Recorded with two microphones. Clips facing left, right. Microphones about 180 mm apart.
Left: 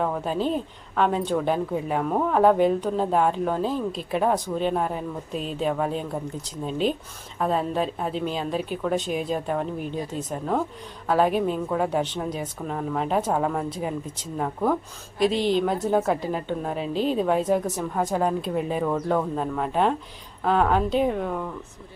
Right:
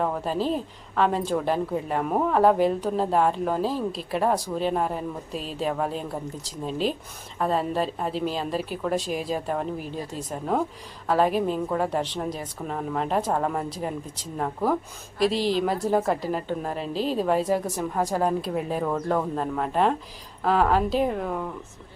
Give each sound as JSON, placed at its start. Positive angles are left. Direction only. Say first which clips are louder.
{"t": 0.0, "sound": "a woman's voice", "louder": "left 1 dB", "side_deg": 0}